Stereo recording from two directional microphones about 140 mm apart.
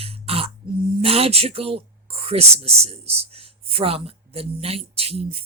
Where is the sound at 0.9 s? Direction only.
45° right (ahead or behind).